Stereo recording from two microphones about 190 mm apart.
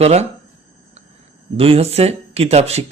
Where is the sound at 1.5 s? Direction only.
30° right (ahead or behind).